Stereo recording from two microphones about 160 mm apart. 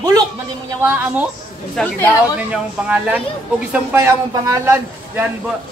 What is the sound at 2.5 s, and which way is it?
A man's voice, 5° right (ahead or behind).